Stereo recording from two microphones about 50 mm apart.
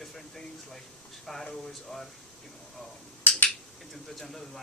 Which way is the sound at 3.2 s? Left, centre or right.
Left.